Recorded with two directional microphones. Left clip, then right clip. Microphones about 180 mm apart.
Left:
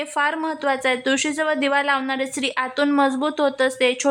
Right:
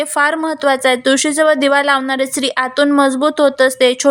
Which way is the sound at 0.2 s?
25° right (ahead or behind).